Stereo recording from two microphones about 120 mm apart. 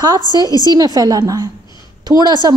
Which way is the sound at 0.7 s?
30° right (ahead or behind).